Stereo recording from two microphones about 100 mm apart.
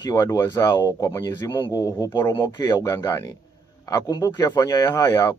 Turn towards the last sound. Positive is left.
turn(degrees=40)  # may be behind; listen again after turning